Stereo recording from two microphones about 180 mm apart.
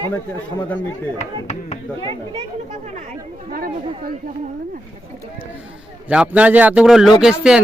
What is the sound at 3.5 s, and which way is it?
Speech, 55° right (ahead or behind).